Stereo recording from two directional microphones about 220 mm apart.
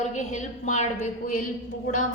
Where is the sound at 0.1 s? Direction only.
35° left (ahead or behind).